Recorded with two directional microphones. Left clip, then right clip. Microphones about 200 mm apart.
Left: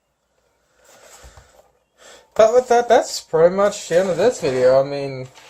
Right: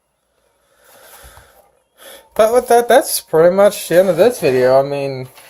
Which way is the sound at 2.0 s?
40° right (ahead or behind).